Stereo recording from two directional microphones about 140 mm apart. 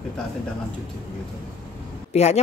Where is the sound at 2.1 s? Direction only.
50° left (ahead or behind).